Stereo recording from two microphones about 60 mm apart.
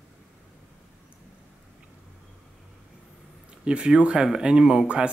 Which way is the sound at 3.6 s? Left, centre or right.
Centre.